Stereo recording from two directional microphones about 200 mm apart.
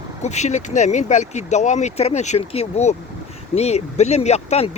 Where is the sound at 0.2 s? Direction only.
35° left (ahead or behind).